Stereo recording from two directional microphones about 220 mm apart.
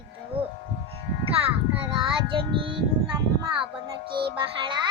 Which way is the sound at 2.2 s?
20° right (ahead or behind).